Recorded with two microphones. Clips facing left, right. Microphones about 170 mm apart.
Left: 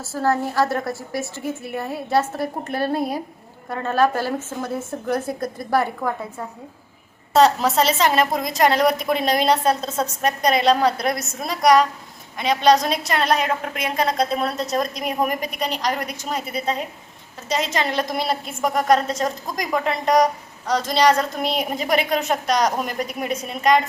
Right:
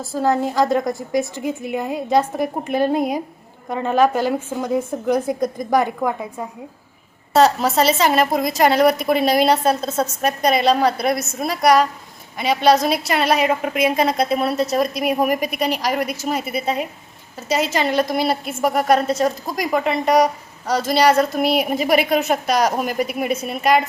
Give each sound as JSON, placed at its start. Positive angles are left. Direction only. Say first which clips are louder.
{"t": 0.0, "sound": "a woman's voice", "louder": "right 3 dB", "side_deg": -15}